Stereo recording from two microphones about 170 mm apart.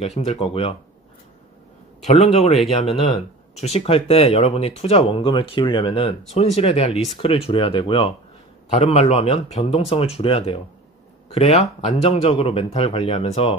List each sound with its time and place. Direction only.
0.0 s speech: 40° left (ahead or behind)
2.0 s speech: 40° left (ahead or behind)
11.6 s speech: 40° left (ahead or behind)